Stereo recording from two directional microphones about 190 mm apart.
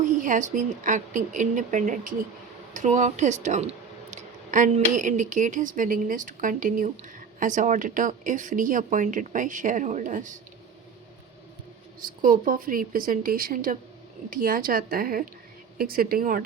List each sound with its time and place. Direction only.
0.2 s speech: 40° right (ahead or behind)
12.2 s speech: 45° right (ahead or behind)